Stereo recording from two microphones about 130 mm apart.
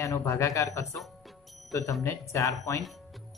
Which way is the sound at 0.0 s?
25° left (ahead or behind).